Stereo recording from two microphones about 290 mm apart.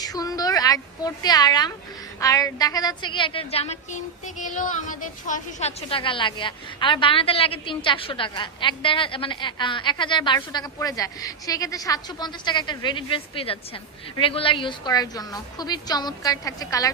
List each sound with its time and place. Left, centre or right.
0.0 s a woman's voice: centre